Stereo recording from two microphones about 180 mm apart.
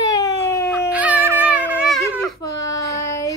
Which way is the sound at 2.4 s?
20° left (ahead or behind).